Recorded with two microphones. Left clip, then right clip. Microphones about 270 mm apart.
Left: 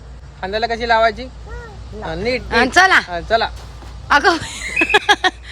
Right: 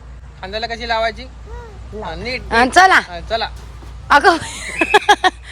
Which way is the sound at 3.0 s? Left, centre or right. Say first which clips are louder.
Left 4 dB; left.